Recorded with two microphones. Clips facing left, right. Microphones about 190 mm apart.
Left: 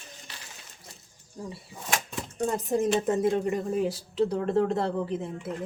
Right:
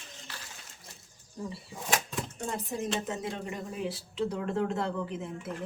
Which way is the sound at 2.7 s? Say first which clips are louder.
Left 10 dB; 45° left (ahead or behind).